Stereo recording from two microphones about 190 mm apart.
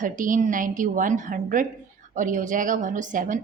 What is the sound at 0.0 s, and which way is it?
A woman's voice, 45° right (ahead or behind).